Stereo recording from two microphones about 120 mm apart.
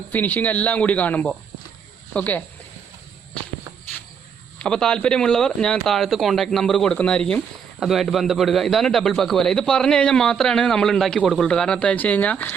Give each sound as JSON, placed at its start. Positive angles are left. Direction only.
{"t": 0.1, "sound": "speech", "side_deg": 15}
{"t": 4.6, "sound": "a man's voice", "side_deg": 5}